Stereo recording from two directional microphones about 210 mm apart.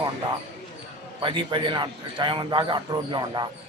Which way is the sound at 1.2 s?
20° right (ahead or behind).